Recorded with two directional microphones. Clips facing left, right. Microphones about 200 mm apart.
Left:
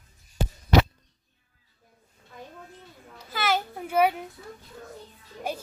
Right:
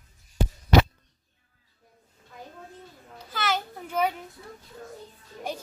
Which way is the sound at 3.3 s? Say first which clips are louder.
Left 2 dB; 10° left (ahead or behind).